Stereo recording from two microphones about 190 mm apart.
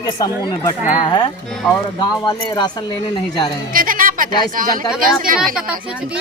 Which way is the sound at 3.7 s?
45° right (ahead or behind).